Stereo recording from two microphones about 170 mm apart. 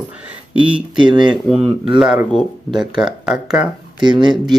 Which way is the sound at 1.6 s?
35° right (ahead or behind).